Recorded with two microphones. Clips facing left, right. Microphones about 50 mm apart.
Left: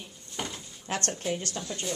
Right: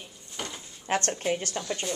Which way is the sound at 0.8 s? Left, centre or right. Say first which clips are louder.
Right 4 dB; right.